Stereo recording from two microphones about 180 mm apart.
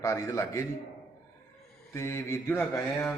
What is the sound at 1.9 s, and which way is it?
A man's voice, 15° left (ahead or behind).